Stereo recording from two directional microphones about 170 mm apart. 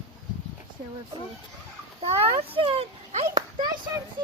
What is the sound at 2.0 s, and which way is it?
A child's voice, 35° right (ahead or behind).